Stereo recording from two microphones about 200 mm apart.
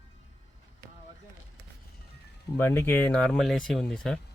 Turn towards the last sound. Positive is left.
turn(degrees=5)  # may be behind; listen again after turning